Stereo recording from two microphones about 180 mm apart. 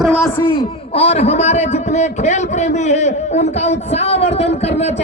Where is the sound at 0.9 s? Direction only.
35° left (ahead or behind).